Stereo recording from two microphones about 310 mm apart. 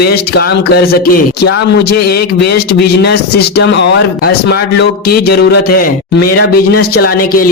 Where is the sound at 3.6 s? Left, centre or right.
Left.